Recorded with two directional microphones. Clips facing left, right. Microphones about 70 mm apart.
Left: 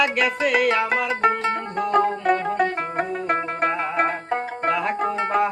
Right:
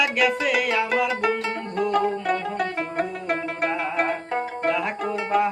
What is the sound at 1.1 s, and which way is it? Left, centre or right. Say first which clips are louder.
Music: left 3 dB; left.